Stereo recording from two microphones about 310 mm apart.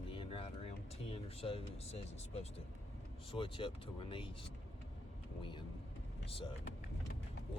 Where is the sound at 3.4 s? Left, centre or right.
Centre.